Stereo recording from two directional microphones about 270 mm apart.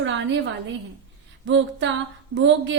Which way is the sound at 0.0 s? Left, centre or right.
Right.